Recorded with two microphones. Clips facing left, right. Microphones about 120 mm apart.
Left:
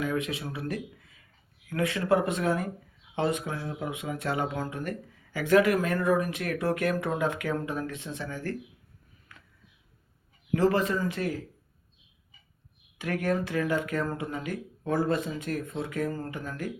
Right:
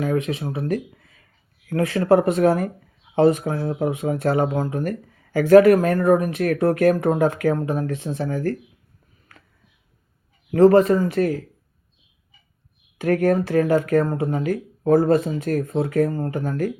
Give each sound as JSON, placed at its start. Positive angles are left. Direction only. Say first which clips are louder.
{"t": 0.0, "sound": "speech", "louder": "right 7 dB", "side_deg": -35}
{"t": 10.5, "sound": "speech", "louder": "right 11 dB", "side_deg": -40}
{"t": 13.0, "sound": "speech", "louder": "right 10 dB", "side_deg": -45}